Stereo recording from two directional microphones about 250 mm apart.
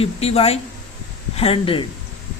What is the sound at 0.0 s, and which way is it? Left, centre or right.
Speech, left.